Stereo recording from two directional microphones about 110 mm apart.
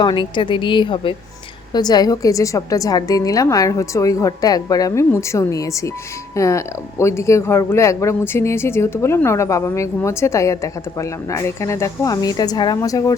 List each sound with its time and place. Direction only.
0.0 s a woman's voice: 45° left (ahead or behind)
1.7 s a woman's voice: 35° left (ahead or behind)